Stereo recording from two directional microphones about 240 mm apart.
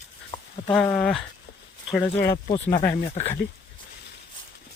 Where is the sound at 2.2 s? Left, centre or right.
Centre.